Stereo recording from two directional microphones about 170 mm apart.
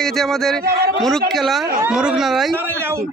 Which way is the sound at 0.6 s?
65° right (ahead or behind).